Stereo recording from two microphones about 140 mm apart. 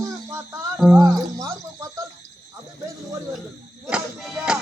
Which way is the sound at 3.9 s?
5° right (ahead or behind).